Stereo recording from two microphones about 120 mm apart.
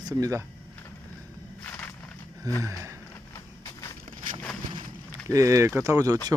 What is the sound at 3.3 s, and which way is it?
Walk, 30° left (ahead or behind).